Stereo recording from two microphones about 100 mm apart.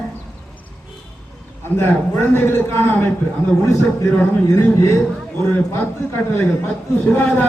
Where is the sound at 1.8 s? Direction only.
20° left (ahead or behind).